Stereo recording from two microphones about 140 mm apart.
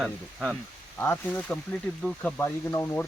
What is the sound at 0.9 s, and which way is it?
Speech, 15° left (ahead or behind).